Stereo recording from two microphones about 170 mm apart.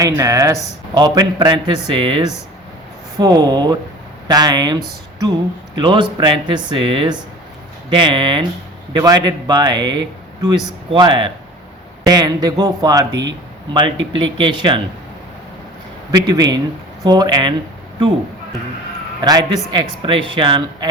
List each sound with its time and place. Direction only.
0.0 s a man's voice: 20° right (ahead or behind)
14.1 s a man's voice: 30° right (ahead or behind)
16.1 s a man's voice: 25° right (ahead or behind)
19.2 s a man's voice: 20° right (ahead or behind)